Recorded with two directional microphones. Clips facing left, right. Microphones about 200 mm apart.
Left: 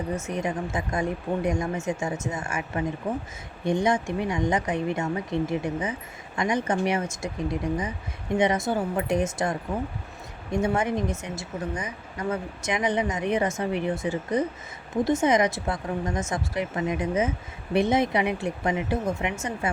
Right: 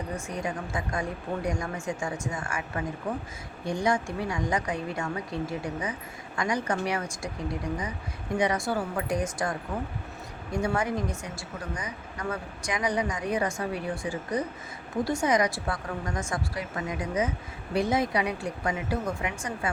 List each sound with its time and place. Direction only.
0.2 s speech: 20° left (ahead or behind)